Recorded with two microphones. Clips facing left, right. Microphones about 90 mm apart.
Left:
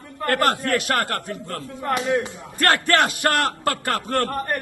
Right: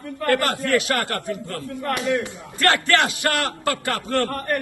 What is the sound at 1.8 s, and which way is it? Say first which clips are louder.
Speech: left 1 dB; 20° left (ahead or behind).